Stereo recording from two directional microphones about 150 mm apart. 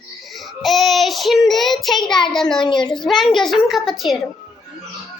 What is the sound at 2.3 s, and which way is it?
Speech, 5° left (ahead or behind).